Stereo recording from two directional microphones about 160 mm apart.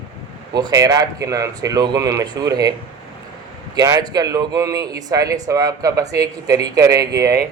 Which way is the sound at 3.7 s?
20° right (ahead or behind).